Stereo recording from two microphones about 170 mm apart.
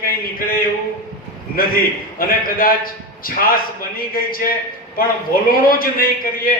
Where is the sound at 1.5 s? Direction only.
60° left (ahead or behind).